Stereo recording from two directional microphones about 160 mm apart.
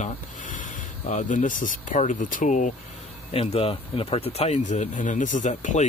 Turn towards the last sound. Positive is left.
turn(degrees=50)  # may be behind; listen again after turning